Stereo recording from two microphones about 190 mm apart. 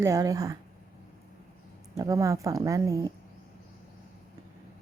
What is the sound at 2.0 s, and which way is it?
Speech, 15° right (ahead or behind).